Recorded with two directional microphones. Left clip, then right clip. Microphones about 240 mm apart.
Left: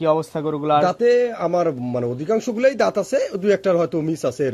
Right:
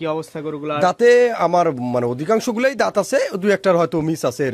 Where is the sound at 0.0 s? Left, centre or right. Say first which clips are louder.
Left 4 dB; centre.